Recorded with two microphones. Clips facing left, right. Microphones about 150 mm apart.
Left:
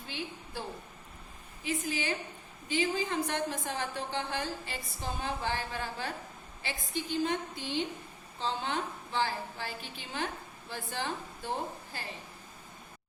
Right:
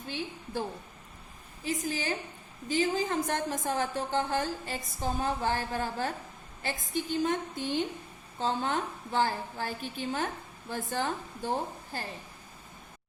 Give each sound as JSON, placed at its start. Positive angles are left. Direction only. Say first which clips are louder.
{"t": 1.6, "sound": "a woman's voice", "louder": "right 2 dB", "side_deg": -40}